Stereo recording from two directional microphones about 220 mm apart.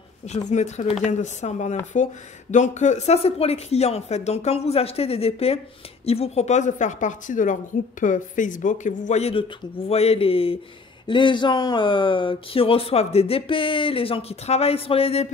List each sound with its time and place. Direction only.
0.5 s speech: 30° left (ahead or behind)